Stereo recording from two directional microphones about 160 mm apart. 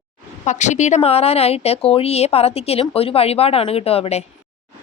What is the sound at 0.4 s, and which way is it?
Speech, 50° left (ahead or behind).